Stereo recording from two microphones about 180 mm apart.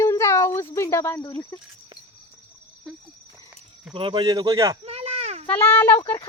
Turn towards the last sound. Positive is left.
turn(degrees=30)  # may be behind; listen again after turning